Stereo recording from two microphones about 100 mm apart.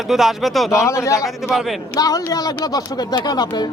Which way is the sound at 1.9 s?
40° left (ahead or behind).